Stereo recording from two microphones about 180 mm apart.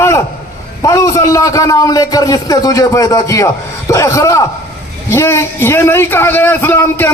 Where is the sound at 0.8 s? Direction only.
15° left (ahead or behind).